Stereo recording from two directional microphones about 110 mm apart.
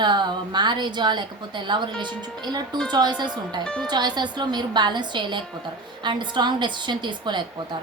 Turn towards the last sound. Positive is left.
turn(degrees=-45)  # may be behind; listen again after turning